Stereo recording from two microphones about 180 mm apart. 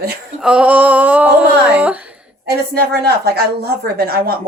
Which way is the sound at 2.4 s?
65° right (ahead or behind).